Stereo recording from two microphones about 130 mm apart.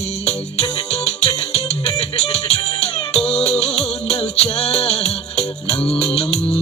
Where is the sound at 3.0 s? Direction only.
50° left (ahead or behind).